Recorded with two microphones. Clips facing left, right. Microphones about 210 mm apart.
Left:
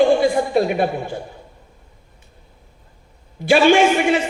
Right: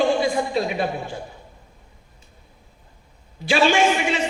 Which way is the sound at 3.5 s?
55° left (ahead or behind).